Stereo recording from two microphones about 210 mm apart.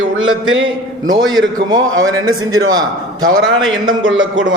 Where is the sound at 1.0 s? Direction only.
20° right (ahead or behind).